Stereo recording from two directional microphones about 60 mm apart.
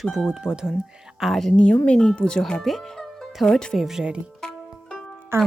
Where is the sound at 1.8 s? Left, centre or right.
Centre.